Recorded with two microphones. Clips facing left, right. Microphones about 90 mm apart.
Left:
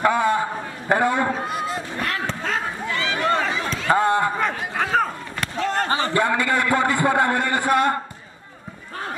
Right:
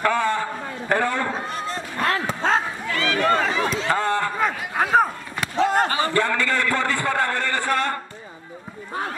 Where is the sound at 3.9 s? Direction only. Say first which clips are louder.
Left 7 dB; 20° left (ahead or behind).